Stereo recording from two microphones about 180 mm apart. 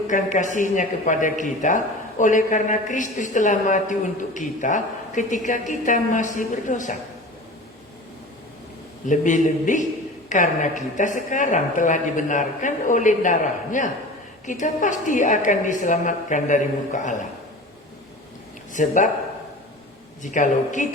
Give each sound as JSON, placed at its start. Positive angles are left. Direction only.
{"t": 0.1, "sound": "speech", "side_deg": 45}
{"t": 9.0, "sound": "speech", "side_deg": 45}
{"t": 18.7, "sound": "speech", "side_deg": 45}
{"t": 20.2, "sound": "speech", "side_deg": 45}